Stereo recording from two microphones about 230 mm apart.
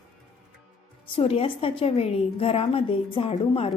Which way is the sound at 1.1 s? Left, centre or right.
Left.